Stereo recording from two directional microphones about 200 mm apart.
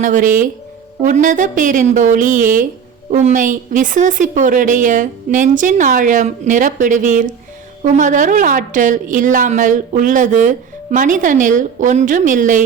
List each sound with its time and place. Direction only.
0.0 s a woman's voice: 40° right (ahead or behind)